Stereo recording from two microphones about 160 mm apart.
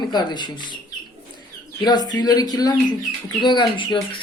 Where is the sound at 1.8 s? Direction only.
25° left (ahead or behind).